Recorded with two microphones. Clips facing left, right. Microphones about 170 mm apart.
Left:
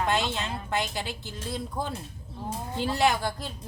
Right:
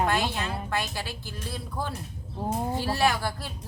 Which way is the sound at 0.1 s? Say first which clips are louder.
Even; 20° left (ahead or behind).